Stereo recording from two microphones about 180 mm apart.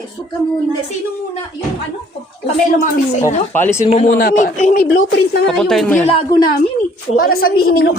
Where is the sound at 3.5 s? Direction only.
15° left (ahead or behind).